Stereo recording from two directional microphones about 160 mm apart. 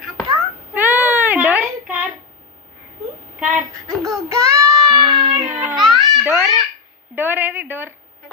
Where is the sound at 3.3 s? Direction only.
5° right (ahead or behind).